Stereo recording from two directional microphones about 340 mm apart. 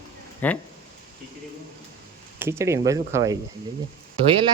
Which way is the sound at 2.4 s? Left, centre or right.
Centre.